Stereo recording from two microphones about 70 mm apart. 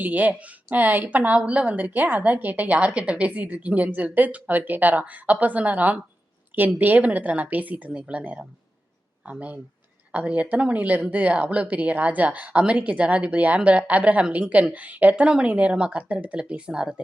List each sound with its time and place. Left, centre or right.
0.0 s a woman's voice: right